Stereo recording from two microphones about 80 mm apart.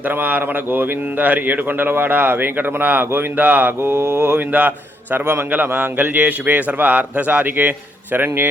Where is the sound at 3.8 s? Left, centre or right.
Right.